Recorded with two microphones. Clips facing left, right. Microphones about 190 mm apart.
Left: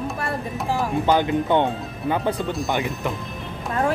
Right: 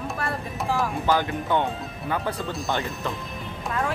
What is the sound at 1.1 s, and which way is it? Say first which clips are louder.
Speech: left 5 dB; 20° left (ahead or behind).